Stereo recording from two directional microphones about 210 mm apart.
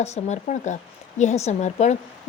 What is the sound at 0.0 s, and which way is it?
A woman's voice, 30° left (ahead or behind).